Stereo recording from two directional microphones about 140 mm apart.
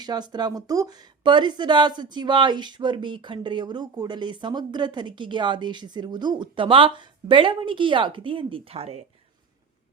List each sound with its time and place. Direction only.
0.0 s speech: 30° right (ahead or behind); by 9.0 s 45° right (ahead or behind)